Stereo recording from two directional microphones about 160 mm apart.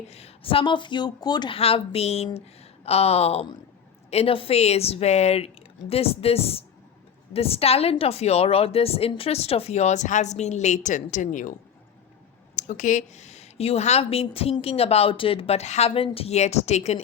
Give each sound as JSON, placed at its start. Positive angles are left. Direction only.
{"t": 0.1, "sound": "a woman's voice", "side_deg": 40}
{"t": 12.5, "sound": "a woman's voice", "side_deg": 50}